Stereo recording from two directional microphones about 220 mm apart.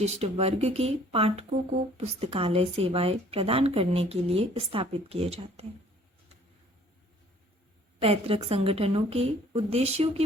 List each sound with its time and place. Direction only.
0.0 s speech: 30° right (ahead or behind)
8.0 s speech: 25° right (ahead or behind)